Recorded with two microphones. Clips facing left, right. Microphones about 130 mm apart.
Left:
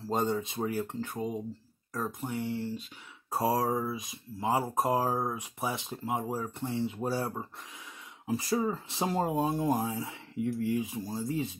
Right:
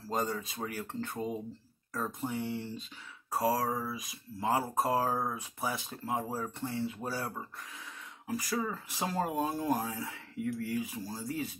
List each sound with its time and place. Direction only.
0.1 s speech: 25° left (ahead or behind)
1.0 s speech: 10° left (ahead or behind)
3.3 s speech: 25° left (ahead or behind)